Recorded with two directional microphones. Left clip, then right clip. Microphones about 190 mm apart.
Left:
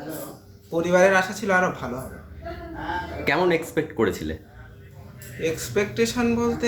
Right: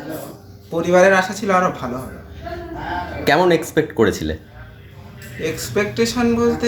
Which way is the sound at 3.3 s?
45° right (ahead or behind).